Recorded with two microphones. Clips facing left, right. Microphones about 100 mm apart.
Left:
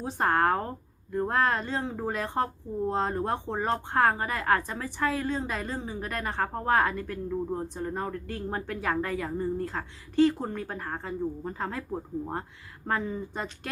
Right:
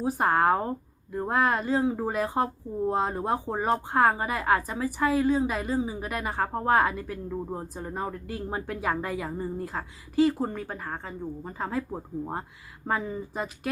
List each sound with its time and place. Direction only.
0.0 s speech: 5° right (ahead or behind)